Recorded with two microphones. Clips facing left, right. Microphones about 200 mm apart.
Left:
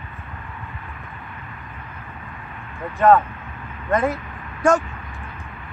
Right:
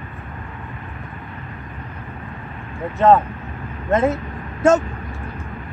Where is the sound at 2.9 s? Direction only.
25° right (ahead or behind).